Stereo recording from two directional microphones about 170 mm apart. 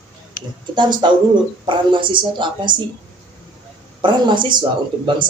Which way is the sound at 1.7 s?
30° right (ahead or behind).